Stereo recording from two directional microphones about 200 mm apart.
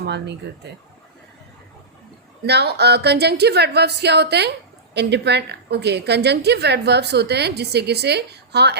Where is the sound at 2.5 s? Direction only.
55° right (ahead or behind).